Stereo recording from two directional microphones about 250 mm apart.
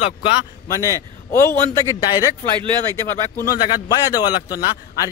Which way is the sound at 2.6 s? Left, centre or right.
Centre.